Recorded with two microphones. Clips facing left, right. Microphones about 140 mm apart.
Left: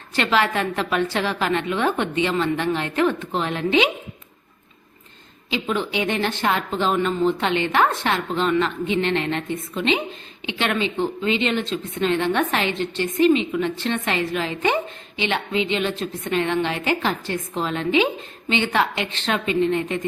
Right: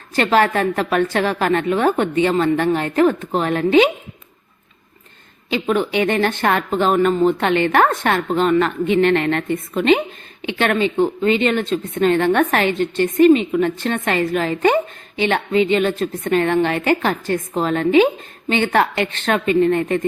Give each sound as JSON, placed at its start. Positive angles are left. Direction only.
{"t": 0.2, "sound": "speech", "side_deg": -45}
{"t": 5.5, "sound": "speech", "side_deg": -55}